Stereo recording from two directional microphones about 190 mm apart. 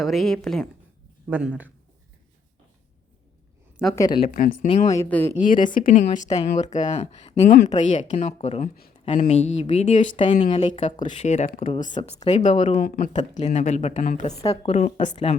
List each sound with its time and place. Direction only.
0.0 s a woman's voice: centre (ahead or behind)
3.9 s speech: 20° left (ahead or behind)
4.2 s speech: 45° left (ahead or behind)
4.9 s speech: 10° left (ahead or behind)
5.3 s speech: 40° left (ahead or behind)
15.1 s speech: 25° left (ahead or behind)